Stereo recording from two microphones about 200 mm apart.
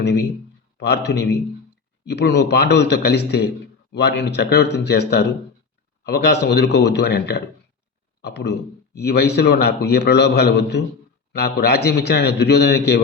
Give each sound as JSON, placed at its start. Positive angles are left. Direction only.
{"t": 0.0, "sound": "a man's voice", "side_deg": 60}